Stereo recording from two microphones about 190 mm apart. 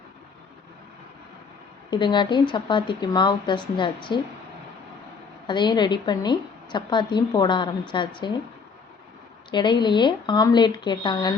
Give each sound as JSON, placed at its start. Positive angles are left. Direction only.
{"t": 1.9, "sound": "a woman's voice", "side_deg": 25}
{"t": 5.5, "sound": "a woman's voice", "side_deg": 25}
{"t": 9.5, "sound": "a woman's voice", "side_deg": 25}